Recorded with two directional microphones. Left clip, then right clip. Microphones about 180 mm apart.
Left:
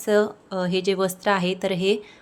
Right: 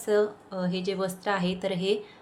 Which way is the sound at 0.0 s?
40° left (ahead or behind).